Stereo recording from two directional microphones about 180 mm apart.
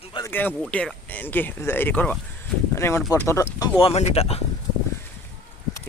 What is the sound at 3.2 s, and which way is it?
Speech, 15° left (ahead or behind).